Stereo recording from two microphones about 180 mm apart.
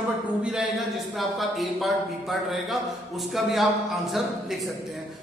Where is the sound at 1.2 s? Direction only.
Centre (ahead or behind).